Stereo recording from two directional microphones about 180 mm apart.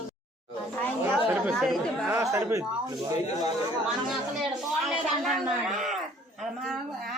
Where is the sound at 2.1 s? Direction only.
15° right (ahead or behind).